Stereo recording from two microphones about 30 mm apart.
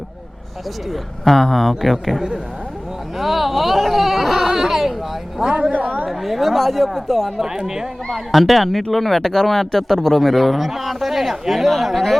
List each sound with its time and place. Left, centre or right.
1.2 s speech: centre
3.2 s a sound: centre
5.4 s a woman's voice: right
5.7 s a sound: right
6.1 s speech: centre
7.3 s speech: centre
8.1 s speech: centre